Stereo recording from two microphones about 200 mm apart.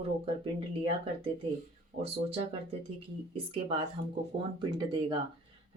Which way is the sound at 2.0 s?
30° right (ahead or behind).